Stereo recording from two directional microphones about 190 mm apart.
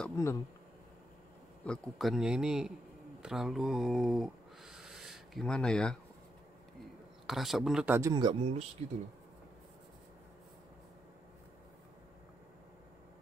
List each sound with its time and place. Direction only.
0.0 s speech: 15° left (ahead or behind)
1.6 s speech: centre (ahead or behind)
7.2 s speech: centre (ahead or behind)
8.1 s speech: 25° right (ahead or behind)